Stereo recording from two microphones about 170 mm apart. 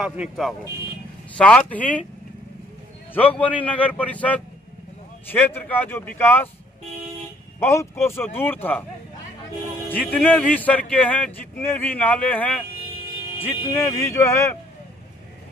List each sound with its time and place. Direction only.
0.0 s speech: 5° right (ahead or behind)
1.4 s a man's voice: 10° left (ahead or behind)
3.2 s a man's voice: 10° left (ahead or behind)
7.6 s a man's voice: 15° left (ahead or behind)
9.8 s a man's voice: 10° left (ahead or behind)